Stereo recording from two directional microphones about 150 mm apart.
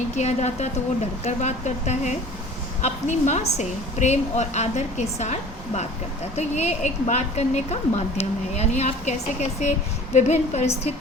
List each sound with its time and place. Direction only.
0.2 s a woman's voice: 45° left (ahead or behind)
10.2 s a woman's voice: 50° left (ahead or behind)